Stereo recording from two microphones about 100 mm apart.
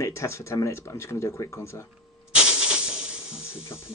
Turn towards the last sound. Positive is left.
turn(degrees=25)  # may be behind; listen again after turning